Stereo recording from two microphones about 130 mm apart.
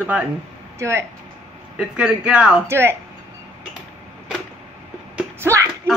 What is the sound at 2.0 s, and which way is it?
Speech, 10° right (ahead or behind).